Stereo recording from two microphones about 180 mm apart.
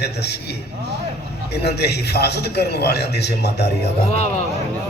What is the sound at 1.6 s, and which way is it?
A man's voice, 65° left (ahead or behind).